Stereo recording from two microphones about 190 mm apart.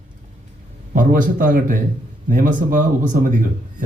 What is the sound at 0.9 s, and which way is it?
A man's voice, 45° right (ahead or behind).